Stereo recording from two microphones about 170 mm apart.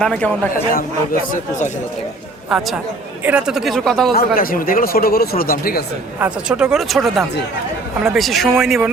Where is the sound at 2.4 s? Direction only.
5° right (ahead or behind).